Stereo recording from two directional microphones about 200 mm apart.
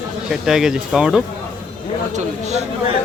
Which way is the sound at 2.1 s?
35° right (ahead or behind).